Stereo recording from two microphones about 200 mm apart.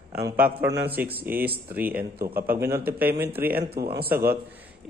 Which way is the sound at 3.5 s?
50° right (ahead or behind).